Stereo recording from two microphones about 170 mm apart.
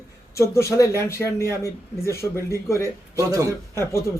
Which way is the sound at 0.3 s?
15° left (ahead or behind).